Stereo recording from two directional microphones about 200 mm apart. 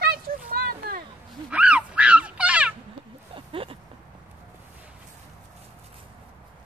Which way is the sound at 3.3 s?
25° right (ahead or behind).